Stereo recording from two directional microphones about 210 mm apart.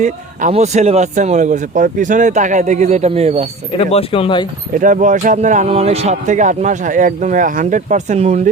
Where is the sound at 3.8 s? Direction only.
30° left (ahead or behind).